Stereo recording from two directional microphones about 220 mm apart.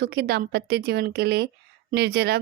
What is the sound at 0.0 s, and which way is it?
A woman's voice, 45° right (ahead or behind).